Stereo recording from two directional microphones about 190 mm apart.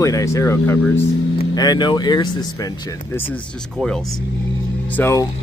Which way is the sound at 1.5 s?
20° left (ahead or behind).